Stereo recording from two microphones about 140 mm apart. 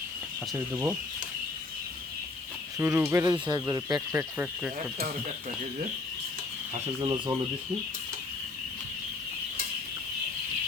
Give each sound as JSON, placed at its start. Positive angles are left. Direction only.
{"t": 0.5, "sound": "speech", "side_deg": -10}
{"t": 2.7, "sound": "speech", "side_deg": -15}
{"t": 3.3, "sound": "speech", "side_deg": -35}
{"t": 7.0, "sound": "speech", "side_deg": -25}